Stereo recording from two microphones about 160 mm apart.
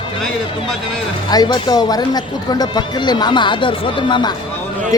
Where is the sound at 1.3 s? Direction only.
25° left (ahead or behind).